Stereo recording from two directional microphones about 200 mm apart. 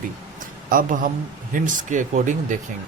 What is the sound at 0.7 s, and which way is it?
Speech, 40° right (ahead or behind).